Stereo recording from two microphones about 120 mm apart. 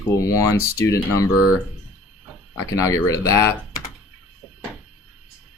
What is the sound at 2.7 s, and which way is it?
Speech, 25° left (ahead or behind).